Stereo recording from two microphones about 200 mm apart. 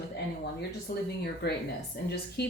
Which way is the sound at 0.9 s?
45° left (ahead or behind).